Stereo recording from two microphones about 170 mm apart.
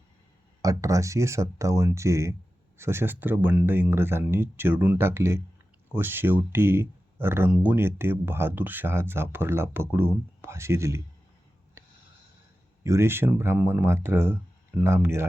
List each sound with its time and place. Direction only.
0.6 s speech: 20° right (ahead or behind)
12.8 s speech: 15° right (ahead or behind)